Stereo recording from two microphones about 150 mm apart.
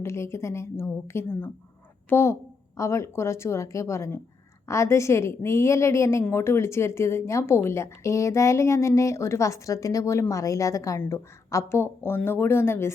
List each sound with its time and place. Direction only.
0.0 s a woman's voice: 15° left (ahead or behind)